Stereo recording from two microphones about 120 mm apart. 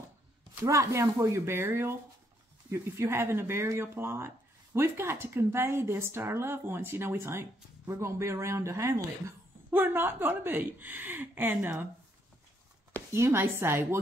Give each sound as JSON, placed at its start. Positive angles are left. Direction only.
{"t": 0.6, "sound": "a woman's voice", "side_deg": -25}
{"t": 13.1, "sound": "a woman's voice", "side_deg": -20}